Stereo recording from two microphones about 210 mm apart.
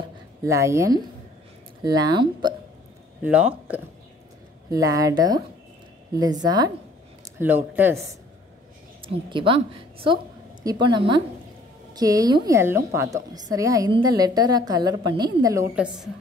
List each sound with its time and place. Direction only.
0.4 s a woman's voice: 15° right (ahead or behind)
3.2 s a woman's voice: 5° right (ahead or behind)
6.4 s a woman's voice: 20° right (ahead or behind)
7.3 s a woman's voice: 10° right (ahead or behind)
9.0 s a woman's voice: 25° right (ahead or behind)
15.7 s a woman's voice: 5° right (ahead or behind)